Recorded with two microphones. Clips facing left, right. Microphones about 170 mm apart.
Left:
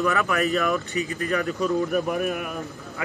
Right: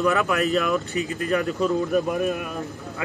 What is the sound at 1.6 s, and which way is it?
Speech, centre (ahead or behind).